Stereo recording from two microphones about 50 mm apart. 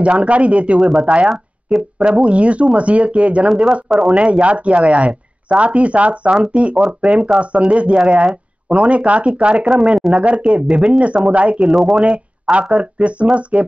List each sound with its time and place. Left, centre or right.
0.0 s speech: right
9.9 s speech: centre
10.2 s speech: right
11.6 s speech: centre
12.0 s speech: right